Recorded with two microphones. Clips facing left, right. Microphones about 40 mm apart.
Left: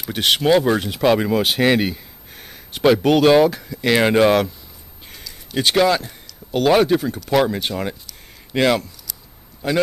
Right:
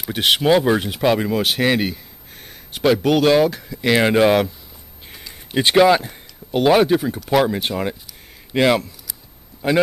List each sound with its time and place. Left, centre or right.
0.0 s speech: centre
5.2 s speech: right
9.6 s speech: centre